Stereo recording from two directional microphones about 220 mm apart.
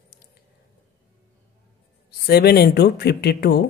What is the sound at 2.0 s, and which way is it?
Speech, 45° left (ahead or behind).